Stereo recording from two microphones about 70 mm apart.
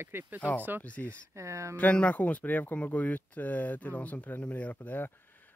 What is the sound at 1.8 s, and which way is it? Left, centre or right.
Speech, centre.